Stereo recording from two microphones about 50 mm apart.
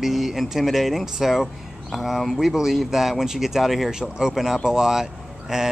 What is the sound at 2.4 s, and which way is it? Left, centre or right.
Speech, centre.